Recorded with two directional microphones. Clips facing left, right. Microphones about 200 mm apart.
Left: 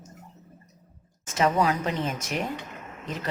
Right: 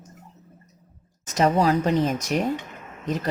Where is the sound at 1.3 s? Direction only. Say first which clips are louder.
Right 4 dB; 40° right (ahead or behind).